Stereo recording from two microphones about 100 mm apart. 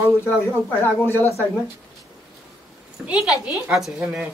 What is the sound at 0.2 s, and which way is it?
A man's voice, 25° left (ahead or behind).